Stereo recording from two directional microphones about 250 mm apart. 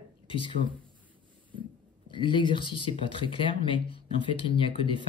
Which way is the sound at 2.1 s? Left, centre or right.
Centre.